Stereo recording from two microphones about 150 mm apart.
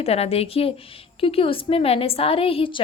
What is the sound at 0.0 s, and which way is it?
A woman's voice, 40° left (ahead or behind).